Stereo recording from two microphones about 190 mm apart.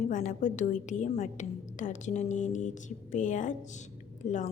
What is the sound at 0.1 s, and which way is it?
A woman's voice, 40° left (ahead or behind).